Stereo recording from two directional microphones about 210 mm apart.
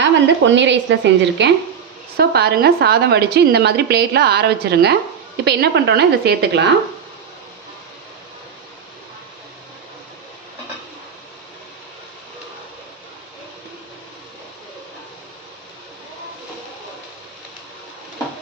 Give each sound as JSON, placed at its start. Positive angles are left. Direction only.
{"t": 0.0, "sound": "a woman's voice", "side_deg": -60}